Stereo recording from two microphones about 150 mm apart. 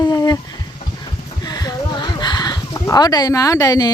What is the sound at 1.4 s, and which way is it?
Speech, 25° left (ahead or behind).